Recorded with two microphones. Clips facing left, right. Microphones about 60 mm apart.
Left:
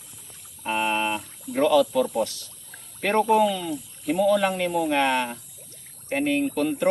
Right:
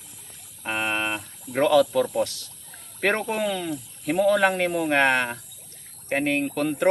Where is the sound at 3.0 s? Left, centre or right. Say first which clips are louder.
Left 5 dB; right.